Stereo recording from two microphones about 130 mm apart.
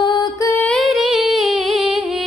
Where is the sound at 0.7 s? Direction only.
Centre (ahead or behind).